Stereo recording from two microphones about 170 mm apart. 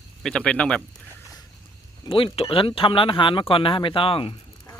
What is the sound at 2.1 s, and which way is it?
Speech, 30° left (ahead or behind).